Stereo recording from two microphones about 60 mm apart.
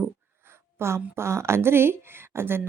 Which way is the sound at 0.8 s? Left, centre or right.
Right.